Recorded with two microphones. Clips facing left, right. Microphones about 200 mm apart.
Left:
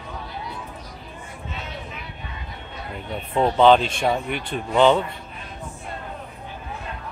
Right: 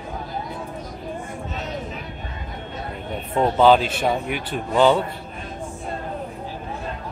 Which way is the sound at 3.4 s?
5° right (ahead or behind).